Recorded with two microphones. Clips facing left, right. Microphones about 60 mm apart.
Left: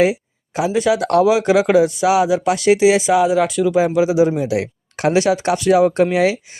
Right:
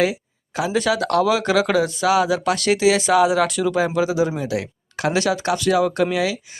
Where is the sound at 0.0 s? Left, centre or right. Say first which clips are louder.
Left 5 dB; left.